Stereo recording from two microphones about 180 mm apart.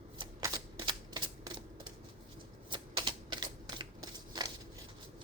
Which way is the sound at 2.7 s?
25° right (ahead or behind).